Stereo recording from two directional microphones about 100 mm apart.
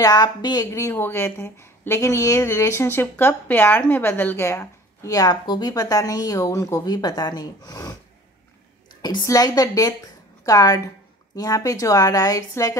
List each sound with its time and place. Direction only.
0.0 s a woman's voice: 40° left (ahead or behind)
0.7 s a woman's voice: 25° left (ahead or behind)
9.2 s a woman's voice: 35° left (ahead or behind)